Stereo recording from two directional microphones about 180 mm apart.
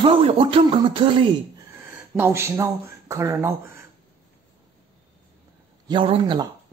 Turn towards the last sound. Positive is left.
turn(degrees=-30)  # may be behind; listen again after turning